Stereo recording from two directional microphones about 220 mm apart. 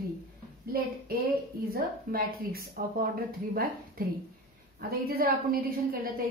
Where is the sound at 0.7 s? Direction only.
40° right (ahead or behind).